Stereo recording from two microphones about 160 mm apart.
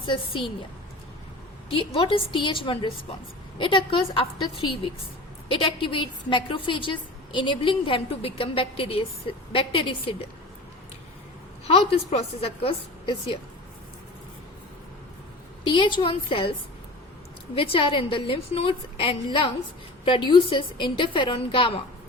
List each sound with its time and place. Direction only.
0.0 s a woman's voice: 30° left (ahead or behind)
1.7 s a woman's voice: 30° left (ahead or behind)
11.7 s a woman's voice: 35° left (ahead or behind)
15.6 s a woman's voice: 30° left (ahead or behind)
17.5 s a woman's voice: 35° left (ahead or behind)